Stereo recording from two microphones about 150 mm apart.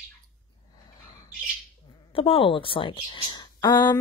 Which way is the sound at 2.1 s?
35° left (ahead or behind).